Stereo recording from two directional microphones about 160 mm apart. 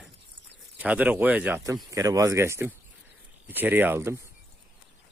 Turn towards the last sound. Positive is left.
turn(degrees=-15)  # may be behind; listen again after turning